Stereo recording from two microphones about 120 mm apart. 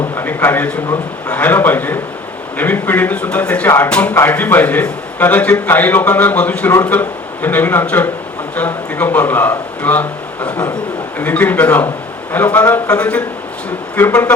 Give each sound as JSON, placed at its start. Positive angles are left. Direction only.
{"t": 0.2, "sound": "a man's voice", "side_deg": 15}